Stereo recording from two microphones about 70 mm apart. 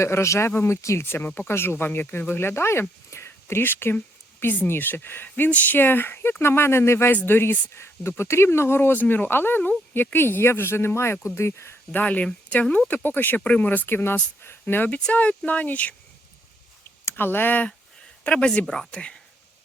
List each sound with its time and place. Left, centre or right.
0.0 s speech: left
3.1 s whispering: left
4.4 s speech: left
11.9 s speech: left
14.7 s speech: left
17.1 s speech: left; by 19.2 s centre